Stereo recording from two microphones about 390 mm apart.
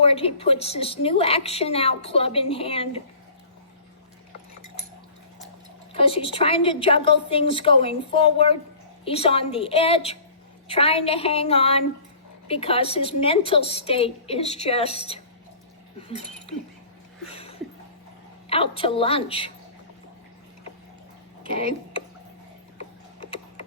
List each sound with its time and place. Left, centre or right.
0.0 s a woman's voice: centre
5.9 s a woman's voice: centre
17.2 s a sound: centre
18.4 s a woman's voice: centre